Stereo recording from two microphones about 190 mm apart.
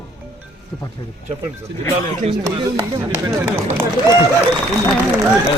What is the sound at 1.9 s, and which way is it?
Speech, 35° right (ahead or behind).